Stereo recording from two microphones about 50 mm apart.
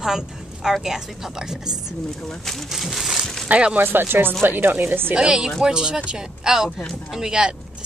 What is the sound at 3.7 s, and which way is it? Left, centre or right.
Speech, right.